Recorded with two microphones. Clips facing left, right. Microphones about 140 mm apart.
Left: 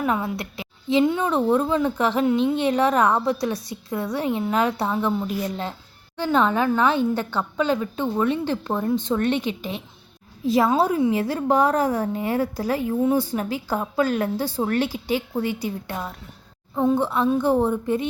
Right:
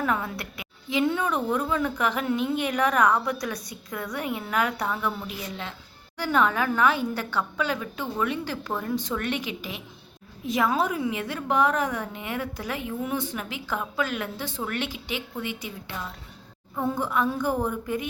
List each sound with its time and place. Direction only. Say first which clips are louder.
0.0 s a woman's voice: left 4 dB; 20° left (ahead or behind)
6.1 s a woman's voice: left 4 dB; 25° left (ahead or behind)
16.7 s a woman's voice: left 6 dB; 20° left (ahead or behind)